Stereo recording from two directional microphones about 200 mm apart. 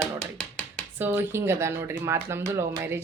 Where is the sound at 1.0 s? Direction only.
10° right (ahead or behind).